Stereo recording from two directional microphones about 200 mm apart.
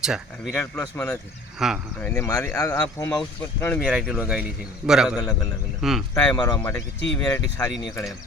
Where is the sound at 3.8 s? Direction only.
5° right (ahead or behind).